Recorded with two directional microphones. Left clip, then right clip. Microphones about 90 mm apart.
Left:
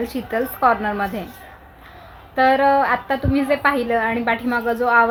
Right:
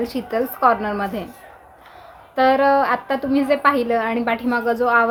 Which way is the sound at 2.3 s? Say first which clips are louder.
Even; 25° right (ahead or behind).